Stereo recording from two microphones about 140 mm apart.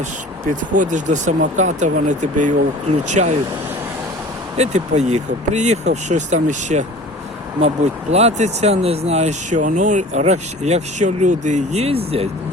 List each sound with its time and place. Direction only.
0.7 s speech: 65° right (ahead or behind)
4.5 s speech: 50° right (ahead or behind)
8.1 s speech: 50° right (ahead or behind)